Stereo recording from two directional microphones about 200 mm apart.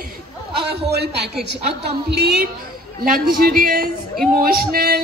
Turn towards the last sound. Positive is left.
turn(degrees=-50)  # may be behind; listen again after turning